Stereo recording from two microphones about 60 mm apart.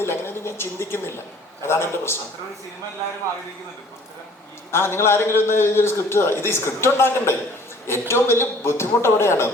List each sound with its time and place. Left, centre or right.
0.0 s a man's voice: left
4.7 s a man's voice: left